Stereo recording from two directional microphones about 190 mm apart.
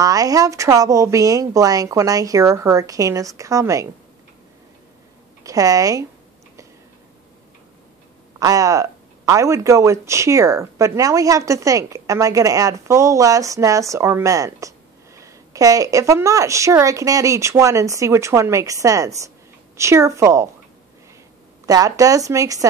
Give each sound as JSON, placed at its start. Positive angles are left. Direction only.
{"t": 0.0, "sound": "speech", "side_deg": -20}
{"t": 5.4, "sound": "speech", "side_deg": -20}
{"t": 8.4, "sound": "speech", "side_deg": -20}
{"t": 21.6, "sound": "speech", "side_deg": -20}